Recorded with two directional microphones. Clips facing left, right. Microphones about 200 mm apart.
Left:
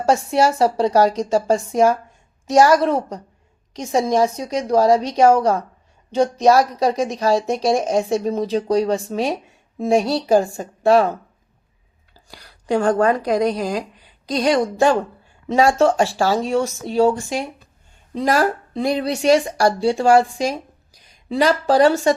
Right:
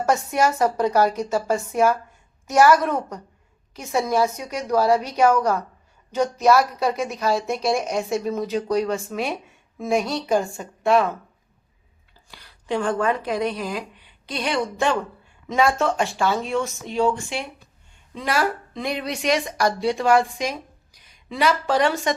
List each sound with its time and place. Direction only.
0.0 s speech: 30° left (ahead or behind)
12.3 s speech: 40° left (ahead or behind)